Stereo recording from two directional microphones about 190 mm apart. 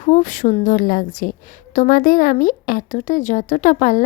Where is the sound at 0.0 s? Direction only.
40° left (ahead or behind).